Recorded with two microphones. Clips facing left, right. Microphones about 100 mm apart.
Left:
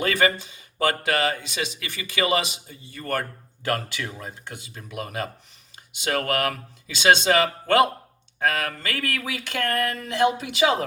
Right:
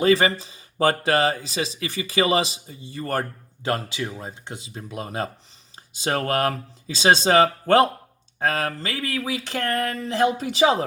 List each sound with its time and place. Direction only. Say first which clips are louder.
0.0 s speech: right 4 dB; 30° right (ahead or behind)
9.0 s speech: even; 70° left (ahead or behind)
9.2 s speech: right 1 dB; 30° right (ahead or behind)